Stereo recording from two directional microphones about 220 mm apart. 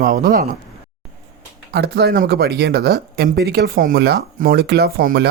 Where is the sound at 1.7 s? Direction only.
45° right (ahead or behind).